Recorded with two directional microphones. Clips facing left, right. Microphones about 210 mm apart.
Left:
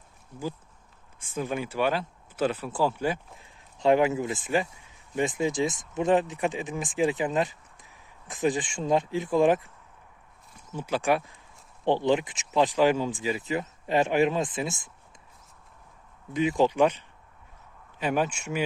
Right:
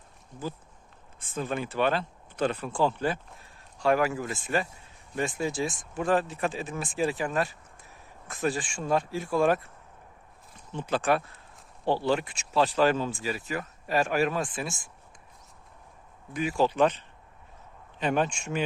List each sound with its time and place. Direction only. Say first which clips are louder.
1.2 s speech: left 1 dB; 10° left (ahead or behind)
3.8 s speech: left 3 dB; 20° left (ahead or behind)
16.3 s speech: left 3 dB; 20° left (ahead or behind)
18.0 s speech: even; 10° left (ahead or behind)